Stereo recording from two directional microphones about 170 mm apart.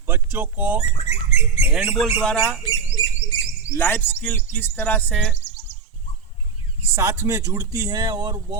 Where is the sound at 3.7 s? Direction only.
15° left (ahead or behind).